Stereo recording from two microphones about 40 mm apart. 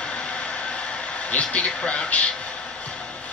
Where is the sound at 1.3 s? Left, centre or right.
Left.